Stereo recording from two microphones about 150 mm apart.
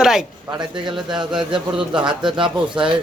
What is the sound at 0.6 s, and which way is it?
Speech, 30° right (ahead or behind).